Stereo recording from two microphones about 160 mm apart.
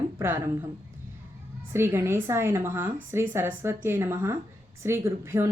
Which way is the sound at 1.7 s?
15° right (ahead or behind).